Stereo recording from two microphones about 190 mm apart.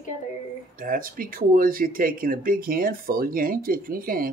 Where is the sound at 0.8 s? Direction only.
50° right (ahead or behind).